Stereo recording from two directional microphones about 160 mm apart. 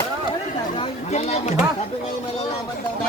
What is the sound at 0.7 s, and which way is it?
Chatter, 40° left (ahead or behind).